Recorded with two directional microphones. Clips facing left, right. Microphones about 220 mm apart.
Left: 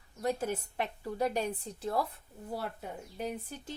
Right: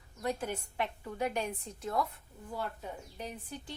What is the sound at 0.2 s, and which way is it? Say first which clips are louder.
Speech: left 3 dB; 40° left (ahead or behind).